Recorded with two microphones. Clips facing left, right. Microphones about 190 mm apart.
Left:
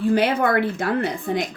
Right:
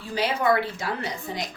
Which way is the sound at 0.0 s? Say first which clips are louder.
Left 6 dB; 55° left (ahead or behind).